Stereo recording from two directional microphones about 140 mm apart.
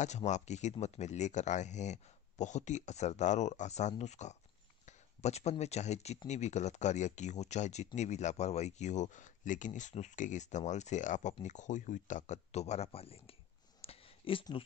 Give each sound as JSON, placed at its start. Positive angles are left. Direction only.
{"t": 0.0, "sound": "speech", "side_deg": 55}